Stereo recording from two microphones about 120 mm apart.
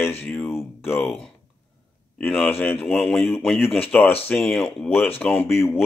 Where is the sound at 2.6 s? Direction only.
15° left (ahead or behind).